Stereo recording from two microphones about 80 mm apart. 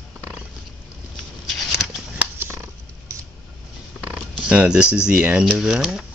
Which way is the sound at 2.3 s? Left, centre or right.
Right.